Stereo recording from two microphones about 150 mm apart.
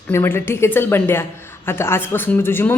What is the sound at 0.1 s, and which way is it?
A woman's voice, 15° left (ahead or behind).